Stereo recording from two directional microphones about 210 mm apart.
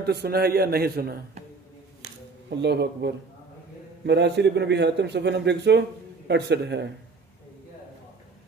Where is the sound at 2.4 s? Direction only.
55° right (ahead or behind).